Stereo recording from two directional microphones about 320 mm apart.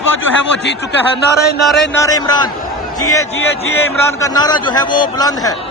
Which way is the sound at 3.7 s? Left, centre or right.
Centre.